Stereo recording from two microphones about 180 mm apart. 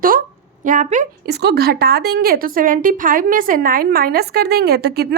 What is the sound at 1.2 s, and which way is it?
A woman's voice, 65° right (ahead or behind).